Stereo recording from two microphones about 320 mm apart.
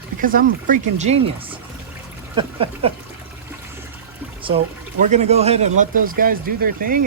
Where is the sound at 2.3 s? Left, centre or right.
Centre.